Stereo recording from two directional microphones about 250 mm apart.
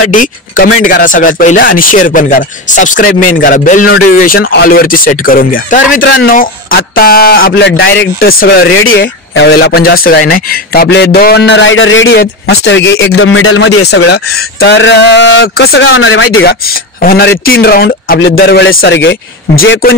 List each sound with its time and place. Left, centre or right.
0.1 s a man's voice: left
4.4 s a man's voice: left
4.6 s a man's voice: left
5.9 s a man's voice: left
6.2 s a man's voice: left
8.6 s speech: left
9.0 s a man's voice: left
13.8 s a man's voice: left
15.9 s a man's voice: left